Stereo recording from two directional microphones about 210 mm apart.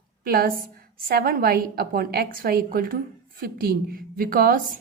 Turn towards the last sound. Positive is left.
turn(degrees=-40)  # may be behind; listen again after turning